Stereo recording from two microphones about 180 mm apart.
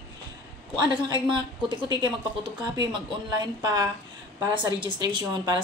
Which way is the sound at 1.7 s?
25° right (ahead or behind).